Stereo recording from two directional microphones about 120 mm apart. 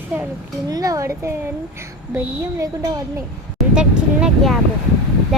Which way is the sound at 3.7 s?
5° right (ahead or behind).